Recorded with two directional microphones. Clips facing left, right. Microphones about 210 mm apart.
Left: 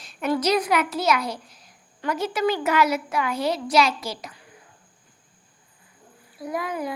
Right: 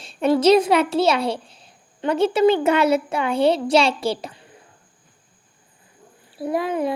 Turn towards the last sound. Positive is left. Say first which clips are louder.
# right 6 dB
turn(degrees=-25)  # may be behind; listen again after turning